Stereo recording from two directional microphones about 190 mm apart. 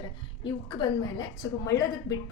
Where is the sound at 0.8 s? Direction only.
20° left (ahead or behind).